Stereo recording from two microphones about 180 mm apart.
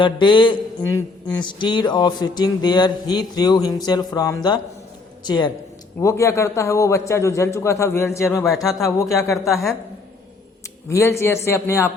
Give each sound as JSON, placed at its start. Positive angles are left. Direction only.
{"t": 0.0, "sound": "a man's voice", "side_deg": 25}
{"t": 9.5, "sound": "a woman's voice", "side_deg": 0}
{"t": 10.8, "sound": "a man's voice", "side_deg": 15}